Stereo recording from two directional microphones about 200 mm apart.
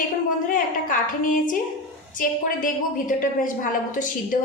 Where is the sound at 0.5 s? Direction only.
40° left (ahead or behind).